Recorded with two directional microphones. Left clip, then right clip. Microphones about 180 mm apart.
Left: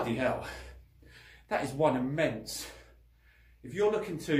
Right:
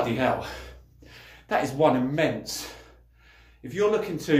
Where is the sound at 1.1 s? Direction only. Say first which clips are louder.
Right 7 dB; 5° left (ahead or behind).